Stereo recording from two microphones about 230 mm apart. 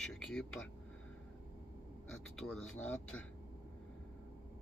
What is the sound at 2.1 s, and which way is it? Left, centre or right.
Speech, centre.